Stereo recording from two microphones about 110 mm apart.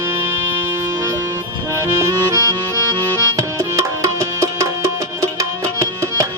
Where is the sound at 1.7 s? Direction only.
25° right (ahead or behind).